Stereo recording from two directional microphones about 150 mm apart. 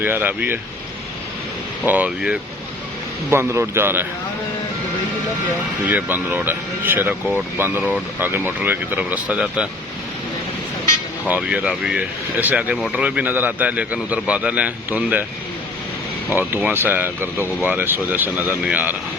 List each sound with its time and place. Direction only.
0.0 s speech: 15° right (ahead or behind)
1.8 s speech: 10° right (ahead or behind)
3.2 s speech: 15° right (ahead or behind)
5.8 s speech: 10° right (ahead or behind)
11.3 s speech: 10° right (ahead or behind)
16.6 s speech: 10° right (ahead or behind)